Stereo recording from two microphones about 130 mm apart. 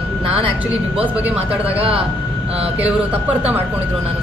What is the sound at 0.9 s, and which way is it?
Speech, 45° right (ahead or behind).